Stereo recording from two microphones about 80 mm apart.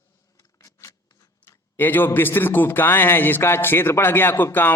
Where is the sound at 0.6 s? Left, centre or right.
Left.